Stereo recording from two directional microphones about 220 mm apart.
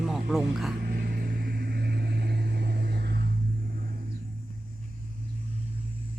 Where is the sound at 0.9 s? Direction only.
40° right (ahead or behind).